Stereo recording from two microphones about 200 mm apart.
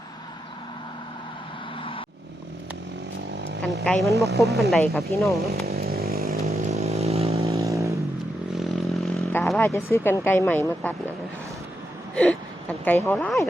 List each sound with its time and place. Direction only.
1.8 s vehicle: 25° left (ahead or behind)
3.8 s speech: centre (ahead or behind)
5.6 s chainsaw: 50° right (ahead or behind)
6.4 s chainsaw: 30° right (ahead or behind)
7.4 s vehicle: 15° right (ahead or behind)
8.5 s vehicle: centre (ahead or behind)
9.3 s speech: 10° left (ahead or behind)
12.1 s a sound: 5° left (ahead or behind)
13.1 s speech: 5° left (ahead or behind)